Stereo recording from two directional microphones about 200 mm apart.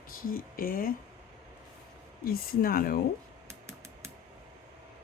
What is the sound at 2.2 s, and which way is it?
Speech, 45° left (ahead or behind).